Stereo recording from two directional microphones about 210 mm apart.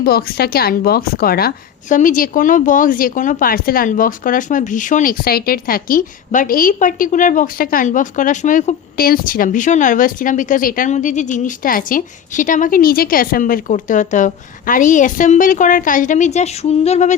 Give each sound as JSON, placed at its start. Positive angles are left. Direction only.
{"t": 0.0, "sound": "a woman's voice", "side_deg": 45}